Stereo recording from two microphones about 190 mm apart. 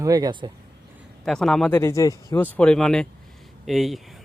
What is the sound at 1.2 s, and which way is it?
A man's voice, centre (ahead or behind).